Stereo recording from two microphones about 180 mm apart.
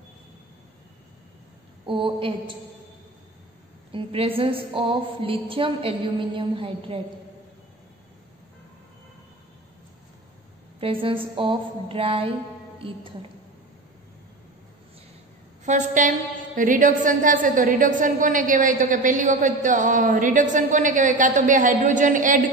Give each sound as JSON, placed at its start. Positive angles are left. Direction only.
{"t": 1.9, "sound": "a woman's voice", "side_deg": -30}
{"t": 3.9, "sound": "a woman's voice", "side_deg": -30}
{"t": 10.8, "sound": "a woman's voice", "side_deg": -30}
{"t": 15.6, "sound": "a woman's voice", "side_deg": -40}